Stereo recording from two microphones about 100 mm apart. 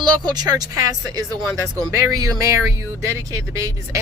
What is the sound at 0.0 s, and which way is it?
Speech, 45° right (ahead or behind).